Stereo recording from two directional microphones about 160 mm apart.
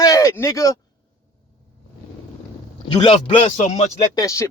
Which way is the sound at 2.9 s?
30° left (ahead or behind).